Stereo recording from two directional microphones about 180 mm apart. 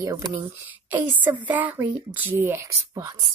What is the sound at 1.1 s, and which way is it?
Speech, 10° right (ahead or behind).